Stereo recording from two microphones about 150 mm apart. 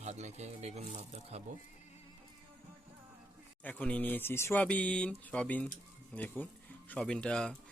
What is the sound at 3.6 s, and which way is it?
Speech, 10° left (ahead or behind).